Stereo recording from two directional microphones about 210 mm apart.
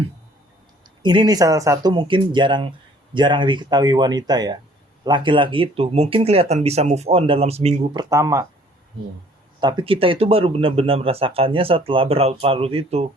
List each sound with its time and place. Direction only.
1.0 s speech: 20° right (ahead or behind)
7.9 s speech: 15° right (ahead or behind)
9.6 s speech: 20° right (ahead or behind)